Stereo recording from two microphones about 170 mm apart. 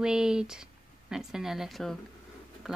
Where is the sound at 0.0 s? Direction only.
5° right (ahead or behind).